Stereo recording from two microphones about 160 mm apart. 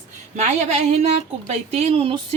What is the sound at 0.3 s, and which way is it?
A woman's voice, 45° right (ahead or behind).